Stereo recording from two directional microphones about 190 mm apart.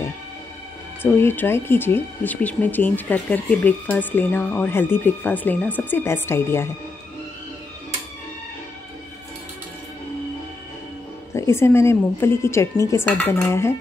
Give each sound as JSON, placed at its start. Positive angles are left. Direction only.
{"t": 1.0, "sound": "speech", "side_deg": 10}
{"t": 11.3, "sound": "speech", "side_deg": 15}